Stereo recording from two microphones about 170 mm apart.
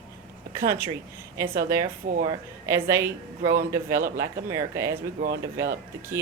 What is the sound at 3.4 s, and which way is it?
Speech, 50° right (ahead or behind).